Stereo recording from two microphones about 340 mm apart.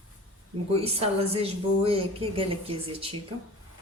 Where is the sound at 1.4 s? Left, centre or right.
Centre.